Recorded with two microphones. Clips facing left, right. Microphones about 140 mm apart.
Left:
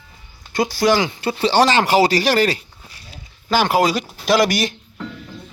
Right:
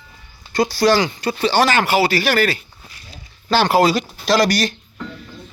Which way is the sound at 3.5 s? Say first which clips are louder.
Right 2 dB; 10° left (ahead or behind).